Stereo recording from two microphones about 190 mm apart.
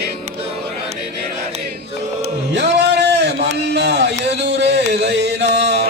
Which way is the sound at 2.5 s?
65° right (ahead or behind).